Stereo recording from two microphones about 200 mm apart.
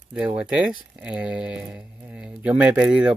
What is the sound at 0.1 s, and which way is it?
Speech, 5° right (ahead or behind).